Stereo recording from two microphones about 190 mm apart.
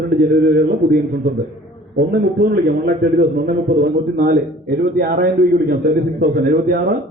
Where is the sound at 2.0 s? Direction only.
55° right (ahead or behind).